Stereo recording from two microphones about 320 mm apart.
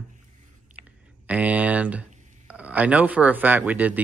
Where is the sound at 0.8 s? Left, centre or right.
Right.